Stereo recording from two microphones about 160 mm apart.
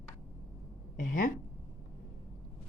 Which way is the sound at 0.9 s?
60° left (ahead or behind).